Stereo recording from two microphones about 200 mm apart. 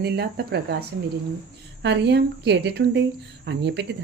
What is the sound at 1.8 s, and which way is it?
Speech, 60° right (ahead or behind).